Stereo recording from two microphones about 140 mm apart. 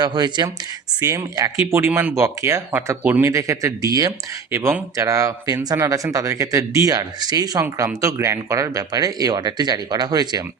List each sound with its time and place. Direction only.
0.0 s speech: 30° right (ahead or behind)